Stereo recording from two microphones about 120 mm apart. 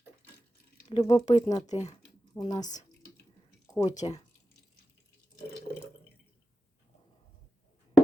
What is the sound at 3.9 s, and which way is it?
Speech, 80° left.